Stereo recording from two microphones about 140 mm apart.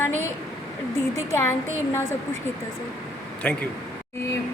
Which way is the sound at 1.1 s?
20° left (ahead or behind).